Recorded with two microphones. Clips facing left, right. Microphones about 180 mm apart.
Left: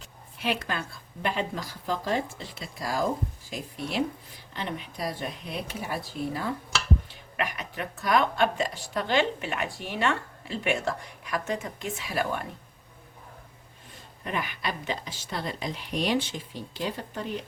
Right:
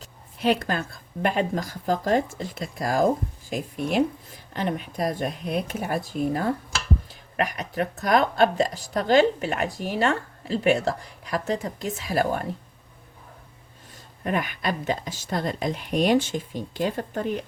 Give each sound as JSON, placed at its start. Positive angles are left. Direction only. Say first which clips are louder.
{"t": 0.0, "sound": "a woman's voice", "louder": "right 7 dB", "side_deg": -40}
{"t": 14.3, "sound": "a woman's voice", "louder": "right 6 dB", "side_deg": -50}